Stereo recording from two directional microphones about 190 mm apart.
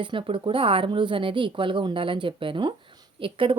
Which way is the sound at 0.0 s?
25° right (ahead or behind).